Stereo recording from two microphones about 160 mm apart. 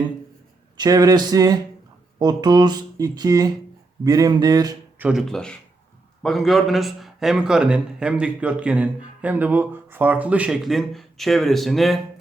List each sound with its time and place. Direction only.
0.8 s speech: 25° right (ahead or behind)
4.9 s a man's voice: 5° right (ahead or behind)